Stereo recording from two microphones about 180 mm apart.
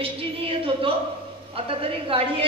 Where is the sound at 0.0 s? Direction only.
30° right (ahead or behind).